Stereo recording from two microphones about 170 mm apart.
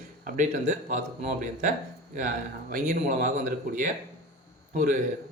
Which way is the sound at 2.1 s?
50° right (ahead or behind).